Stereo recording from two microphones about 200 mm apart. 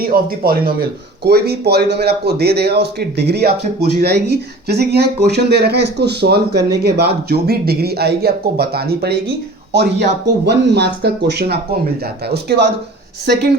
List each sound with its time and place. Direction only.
0.0 s speech: 45° right (ahead or behind)